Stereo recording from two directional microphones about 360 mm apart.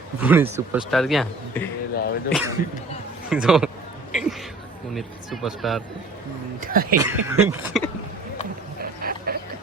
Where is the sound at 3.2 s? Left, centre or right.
Centre.